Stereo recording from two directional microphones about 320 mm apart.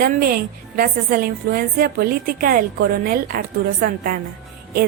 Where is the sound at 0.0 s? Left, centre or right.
Right.